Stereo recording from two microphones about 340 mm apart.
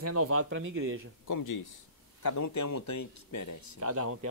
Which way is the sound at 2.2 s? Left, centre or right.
Left.